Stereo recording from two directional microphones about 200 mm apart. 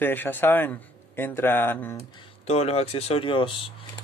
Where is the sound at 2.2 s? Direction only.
30° left (ahead or behind).